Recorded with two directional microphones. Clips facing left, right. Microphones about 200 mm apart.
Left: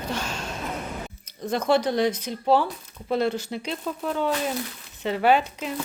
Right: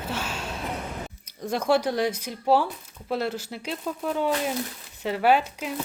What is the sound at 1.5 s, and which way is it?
Speech, 10° right (ahead or behind).